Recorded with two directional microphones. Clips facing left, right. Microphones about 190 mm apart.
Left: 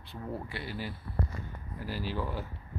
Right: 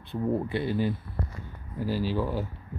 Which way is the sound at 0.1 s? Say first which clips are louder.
Right 11 dB; 20° right (ahead or behind).